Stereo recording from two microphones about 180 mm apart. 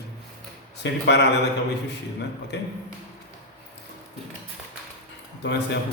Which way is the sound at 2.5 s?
70° left (ahead or behind).